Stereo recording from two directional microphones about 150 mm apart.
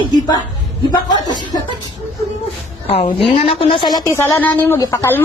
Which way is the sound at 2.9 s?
35° left (ahead or behind).